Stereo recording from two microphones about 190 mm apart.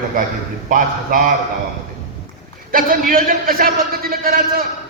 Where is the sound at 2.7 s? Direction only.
45° right (ahead or behind).